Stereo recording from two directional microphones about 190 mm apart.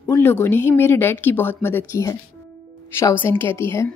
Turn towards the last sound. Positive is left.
turn(degrees=15)  # may be behind; listen again after turning